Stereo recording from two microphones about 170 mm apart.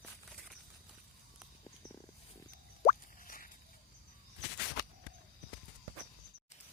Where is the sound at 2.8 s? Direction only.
50° left (ahead or behind).